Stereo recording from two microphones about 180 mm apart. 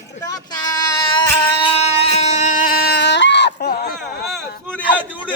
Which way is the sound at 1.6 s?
30° left (ahead or behind).